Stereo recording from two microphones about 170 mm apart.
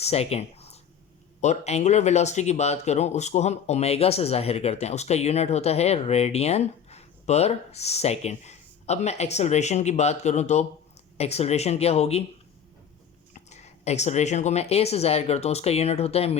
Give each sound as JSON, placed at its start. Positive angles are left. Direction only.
{"t": 0.0, "sound": "speech", "side_deg": 35}
{"t": 13.3, "sound": "speech", "side_deg": 40}